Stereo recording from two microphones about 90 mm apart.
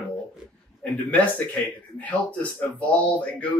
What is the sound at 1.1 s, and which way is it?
Speech, 15° left (ahead or behind).